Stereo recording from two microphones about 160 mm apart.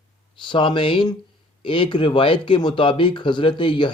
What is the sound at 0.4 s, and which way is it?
Speech, 30° left (ahead or behind).